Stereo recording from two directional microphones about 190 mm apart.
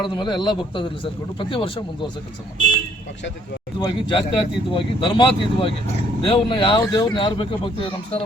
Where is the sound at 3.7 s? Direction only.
25° left (ahead or behind).